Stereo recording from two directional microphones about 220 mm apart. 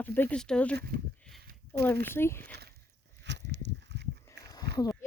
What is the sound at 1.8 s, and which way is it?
Speech, 10° left (ahead or behind).